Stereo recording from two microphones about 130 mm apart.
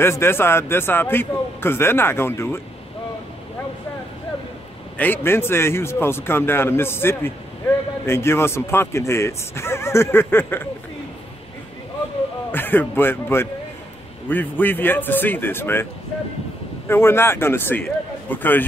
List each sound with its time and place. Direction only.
0.0 s a man's voice: 20° left (ahead or behind)
4.9 s a man's voice: 15° left (ahead or behind)
12.4 s a man's voice: 15° left (ahead or behind)